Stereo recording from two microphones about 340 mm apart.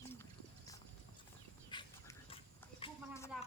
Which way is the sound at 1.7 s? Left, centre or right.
Centre.